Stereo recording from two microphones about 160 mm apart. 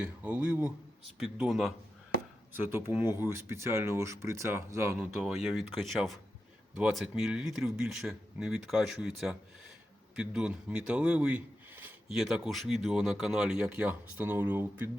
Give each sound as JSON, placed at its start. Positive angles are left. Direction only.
{"t": 0.0, "sound": "a man's voice", "side_deg": -10}
{"t": 2.5, "sound": "speech", "side_deg": -15}
{"t": 5.2, "sound": "a man's voice", "side_deg": 0}